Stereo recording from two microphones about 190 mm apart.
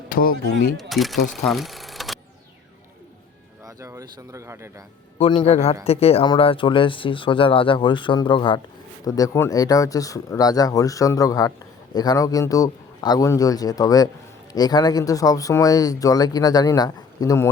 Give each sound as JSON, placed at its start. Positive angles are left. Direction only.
{"t": 0.1, "sound": "a sound", "side_deg": 50}
{"t": 0.8, "sound": "speech", "side_deg": 0}
{"t": 1.5, "sound": "sewing machine", "side_deg": 0}
{"t": 3.7, "sound": "speech", "side_deg": -15}
{"t": 5.2, "sound": "a man's voice", "side_deg": 35}